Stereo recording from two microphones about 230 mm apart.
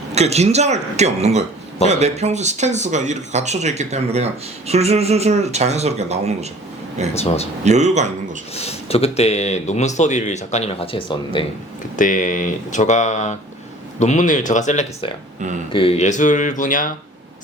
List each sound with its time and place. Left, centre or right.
0.1 s a man's voice: right
8.5 s speech: left
11.9 s speech: left
15.4 s speech: right
15.7 s speech: left